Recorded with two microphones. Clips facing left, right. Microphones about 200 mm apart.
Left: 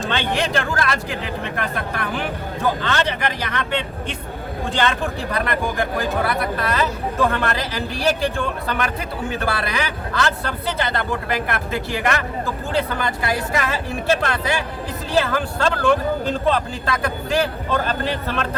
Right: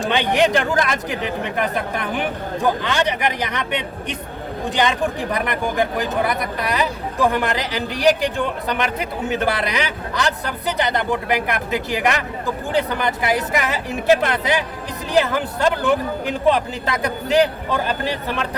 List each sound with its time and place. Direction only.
0.1 s speech: 15° right (ahead or behind)